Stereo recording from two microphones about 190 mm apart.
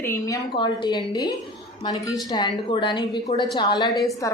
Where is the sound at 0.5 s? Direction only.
25° left (ahead or behind).